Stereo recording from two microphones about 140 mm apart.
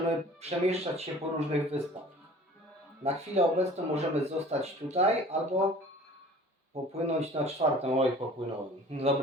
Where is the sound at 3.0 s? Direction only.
50° right (ahead or behind).